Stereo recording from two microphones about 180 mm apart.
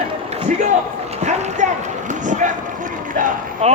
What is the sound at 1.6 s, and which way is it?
Speech, 40° right (ahead or behind).